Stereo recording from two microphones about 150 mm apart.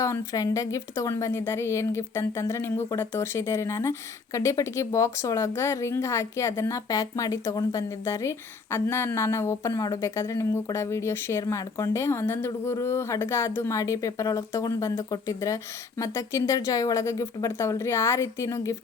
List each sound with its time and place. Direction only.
0.0 s a woman's voice: 20° left (ahead or behind)